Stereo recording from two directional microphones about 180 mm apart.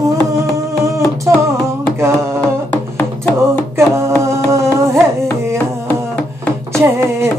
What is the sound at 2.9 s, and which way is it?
Music, 10° left (ahead or behind).